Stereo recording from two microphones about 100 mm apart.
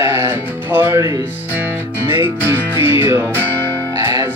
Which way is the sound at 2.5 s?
25° right (ahead or behind).